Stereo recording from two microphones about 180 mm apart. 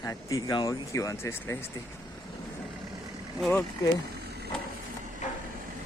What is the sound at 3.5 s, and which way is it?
Speech, 10° left (ahead or behind).